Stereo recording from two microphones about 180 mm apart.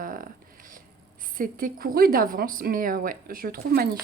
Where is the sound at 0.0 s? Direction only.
50° right (ahead or behind).